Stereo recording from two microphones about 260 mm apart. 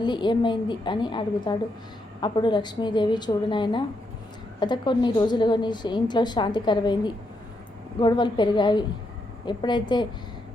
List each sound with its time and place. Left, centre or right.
0.0 s a woman's voice: centre